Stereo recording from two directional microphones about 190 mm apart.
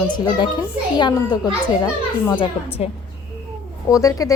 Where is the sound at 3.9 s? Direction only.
20° left (ahead or behind).